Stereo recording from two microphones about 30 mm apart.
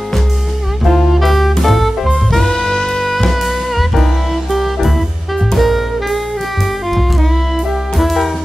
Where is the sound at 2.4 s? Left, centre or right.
Left.